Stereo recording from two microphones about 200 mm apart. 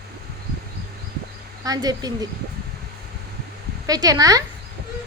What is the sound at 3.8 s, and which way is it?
Speech, 20° right (ahead or behind).